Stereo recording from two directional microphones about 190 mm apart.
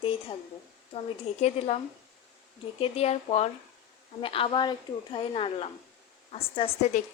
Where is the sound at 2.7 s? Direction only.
30° left (ahead or behind).